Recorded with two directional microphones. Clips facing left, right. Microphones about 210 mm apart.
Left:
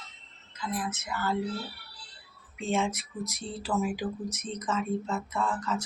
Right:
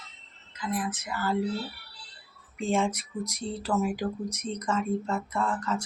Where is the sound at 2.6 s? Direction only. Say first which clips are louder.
Right 2 dB; 5° left (ahead or behind).